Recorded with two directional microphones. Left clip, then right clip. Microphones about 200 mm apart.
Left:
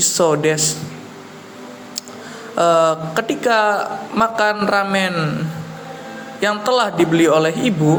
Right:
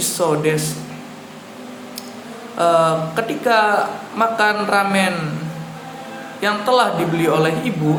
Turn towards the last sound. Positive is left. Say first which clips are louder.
# left 3 dB
turn(degrees=40)  # may be behind; listen again after turning